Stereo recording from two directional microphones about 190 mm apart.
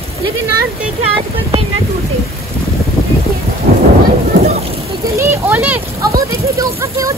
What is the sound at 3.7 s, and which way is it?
Thunder, 50° right (ahead or behind).